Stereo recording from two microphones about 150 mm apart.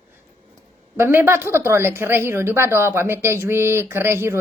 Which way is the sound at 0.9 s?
15° right (ahead or behind).